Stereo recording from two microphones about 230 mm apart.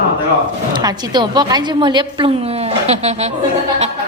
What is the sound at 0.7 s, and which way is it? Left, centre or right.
A woman's voice, centre.